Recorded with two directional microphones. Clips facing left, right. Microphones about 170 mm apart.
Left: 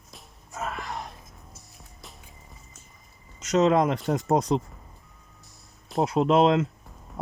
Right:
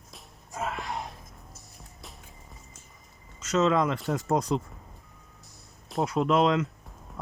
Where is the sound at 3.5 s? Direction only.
40° left (ahead or behind).